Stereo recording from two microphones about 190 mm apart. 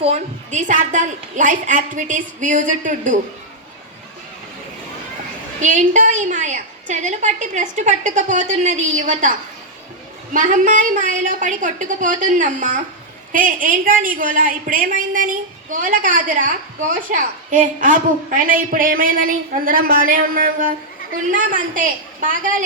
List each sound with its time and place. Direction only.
0.0 s a woman's voice: 35° right (ahead or behind)
5.5 s a woman's voice: 40° right (ahead or behind)
10.3 s a woman's voice: 40° right (ahead or behind)